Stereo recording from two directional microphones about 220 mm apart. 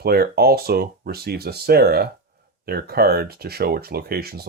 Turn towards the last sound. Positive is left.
turn(degrees=-45)  # may be behind; listen again after turning